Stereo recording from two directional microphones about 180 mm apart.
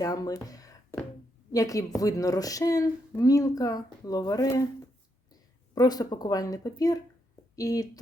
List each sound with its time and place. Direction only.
0.0 s speech: 20° left (ahead or behind)